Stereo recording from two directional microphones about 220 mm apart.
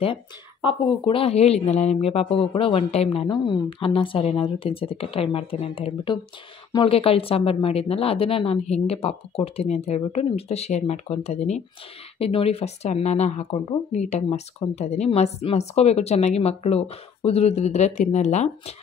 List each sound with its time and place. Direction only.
0.0 s speech: 25° left (ahead or behind)